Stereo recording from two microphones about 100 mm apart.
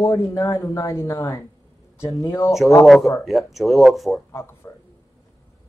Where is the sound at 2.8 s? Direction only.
Centre (ahead or behind).